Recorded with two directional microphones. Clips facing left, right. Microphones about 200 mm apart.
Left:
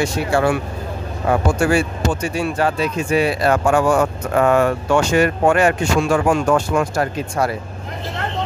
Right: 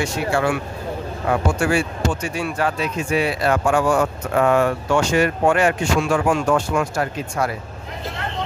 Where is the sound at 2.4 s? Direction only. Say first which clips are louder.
Left 5 dB; 30° left (ahead or behind).